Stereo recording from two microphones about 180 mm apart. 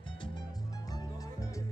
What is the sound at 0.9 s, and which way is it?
Music, 20° left (ahead or behind).